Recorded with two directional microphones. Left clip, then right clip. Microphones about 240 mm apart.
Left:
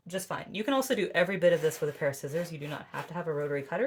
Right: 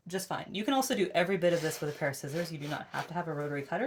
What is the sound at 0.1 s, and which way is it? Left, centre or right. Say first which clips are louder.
Speech: left 1 dB; left.